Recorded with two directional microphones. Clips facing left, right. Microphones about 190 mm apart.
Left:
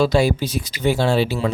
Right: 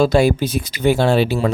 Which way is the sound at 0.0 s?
50° right (ahead or behind).